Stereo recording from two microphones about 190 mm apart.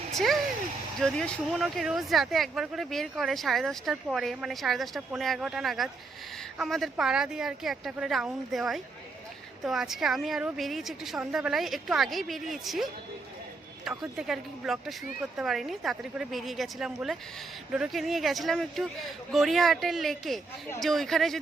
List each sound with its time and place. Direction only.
0.9 s speech: centre (ahead or behind)